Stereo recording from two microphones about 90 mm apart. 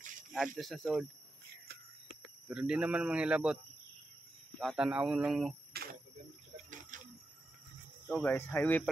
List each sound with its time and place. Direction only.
0.3 s speech: centre (ahead or behind)
2.5 s speech: 10° right (ahead or behind)
4.7 s speech: 10° right (ahead or behind)
8.1 s speech: 15° left (ahead or behind)